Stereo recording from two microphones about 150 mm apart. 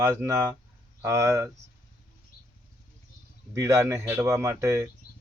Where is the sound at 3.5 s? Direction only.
20° right (ahead or behind).